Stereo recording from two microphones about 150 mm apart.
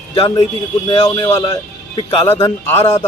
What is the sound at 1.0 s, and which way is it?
Speech, 30° left (ahead or behind).